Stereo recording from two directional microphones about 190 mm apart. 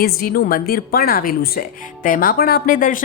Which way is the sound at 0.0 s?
50° left (ahead or behind).